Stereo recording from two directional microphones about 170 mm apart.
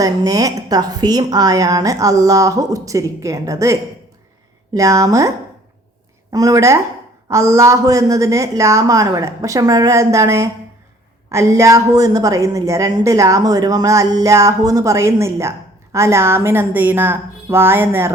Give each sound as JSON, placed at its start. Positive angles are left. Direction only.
{"t": 0.0, "sound": "a woman's voice", "side_deg": -20}
{"t": 6.3, "sound": "a woman's voice", "side_deg": -20}